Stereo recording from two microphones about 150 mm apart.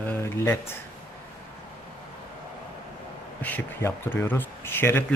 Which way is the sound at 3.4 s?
10° left (ahead or behind).